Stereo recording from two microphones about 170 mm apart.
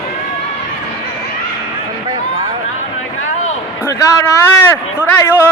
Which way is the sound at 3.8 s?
15° left (ahead or behind).